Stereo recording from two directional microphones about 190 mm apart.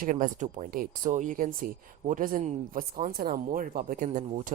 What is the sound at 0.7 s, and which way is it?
Speech, 45° right (ahead or behind).